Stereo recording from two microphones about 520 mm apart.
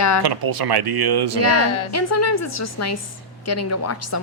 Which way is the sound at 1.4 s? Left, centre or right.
Left.